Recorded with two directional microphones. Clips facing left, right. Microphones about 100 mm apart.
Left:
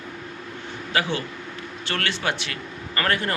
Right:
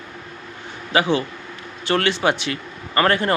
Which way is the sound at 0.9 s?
20° right (ahead or behind).